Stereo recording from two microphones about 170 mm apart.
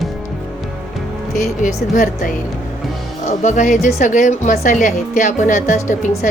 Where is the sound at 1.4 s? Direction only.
55° left (ahead or behind).